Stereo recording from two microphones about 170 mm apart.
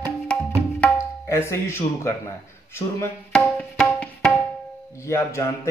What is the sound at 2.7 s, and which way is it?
Speech, 15° left (ahead or behind).